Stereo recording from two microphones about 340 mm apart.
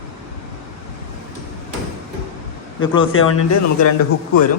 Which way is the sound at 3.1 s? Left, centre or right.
Left.